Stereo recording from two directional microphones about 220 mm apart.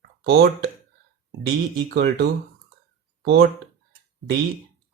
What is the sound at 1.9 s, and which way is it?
Speech, 45° right (ahead or behind).